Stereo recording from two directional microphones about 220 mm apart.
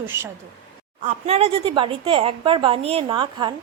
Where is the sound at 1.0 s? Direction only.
30° right (ahead or behind).